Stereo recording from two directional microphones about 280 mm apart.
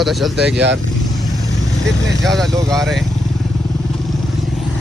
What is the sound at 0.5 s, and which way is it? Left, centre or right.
Speech, right.